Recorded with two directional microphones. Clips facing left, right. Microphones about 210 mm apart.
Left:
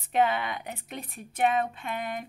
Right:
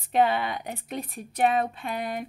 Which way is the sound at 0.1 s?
35° right (ahead or behind).